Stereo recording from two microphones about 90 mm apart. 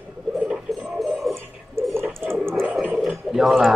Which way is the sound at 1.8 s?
25° right (ahead or behind).